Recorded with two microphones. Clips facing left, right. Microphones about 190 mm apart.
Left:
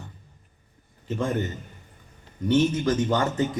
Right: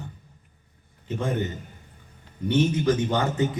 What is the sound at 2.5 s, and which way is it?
Speech, 45° left (ahead or behind).